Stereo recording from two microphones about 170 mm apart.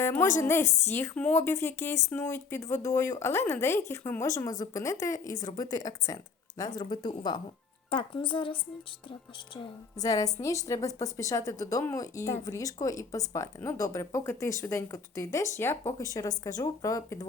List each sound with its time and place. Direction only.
0.0 s a woman's voice: 15° left (ahead or behind); by 8.5 s 30° left (ahead or behind)
10.0 s a woman's voice: 20° left (ahead or behind)